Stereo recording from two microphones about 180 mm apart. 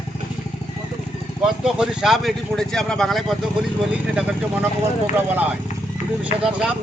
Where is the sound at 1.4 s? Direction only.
5° right (ahead or behind).